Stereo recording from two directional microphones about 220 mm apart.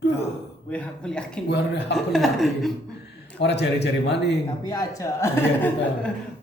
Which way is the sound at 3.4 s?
50° left (ahead or behind).